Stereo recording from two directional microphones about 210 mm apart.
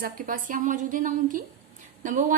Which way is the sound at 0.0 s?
40° right (ahead or behind).